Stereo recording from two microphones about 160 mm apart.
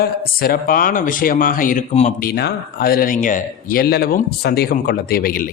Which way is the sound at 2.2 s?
80° left.